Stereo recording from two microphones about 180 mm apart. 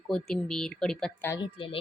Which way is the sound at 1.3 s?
25° left (ahead or behind).